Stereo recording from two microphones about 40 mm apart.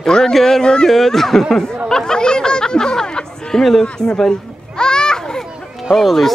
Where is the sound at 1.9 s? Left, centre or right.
Centre.